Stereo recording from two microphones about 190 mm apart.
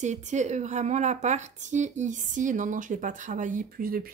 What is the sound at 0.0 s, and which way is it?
Speech, 40° right (ahead or behind).